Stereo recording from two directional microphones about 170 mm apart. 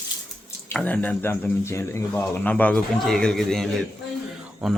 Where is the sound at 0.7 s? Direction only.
5° left (ahead or behind).